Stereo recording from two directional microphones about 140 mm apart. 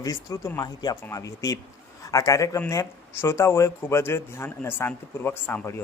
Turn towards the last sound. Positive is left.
turn(degrees=15)  # may be behind; listen again after turning